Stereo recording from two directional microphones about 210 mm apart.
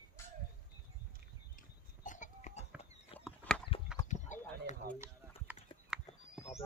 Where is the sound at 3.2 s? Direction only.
5° left (ahead or behind).